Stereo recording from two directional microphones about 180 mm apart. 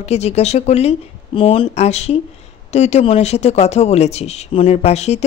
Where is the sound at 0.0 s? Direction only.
35° left (ahead or behind).